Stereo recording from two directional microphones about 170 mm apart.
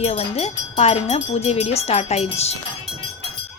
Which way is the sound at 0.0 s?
40° left (ahead or behind).